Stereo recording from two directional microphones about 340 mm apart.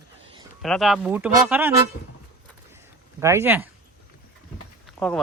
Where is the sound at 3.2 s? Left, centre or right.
Centre.